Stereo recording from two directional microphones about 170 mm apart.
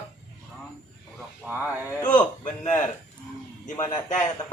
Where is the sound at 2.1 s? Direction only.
45° left (ahead or behind).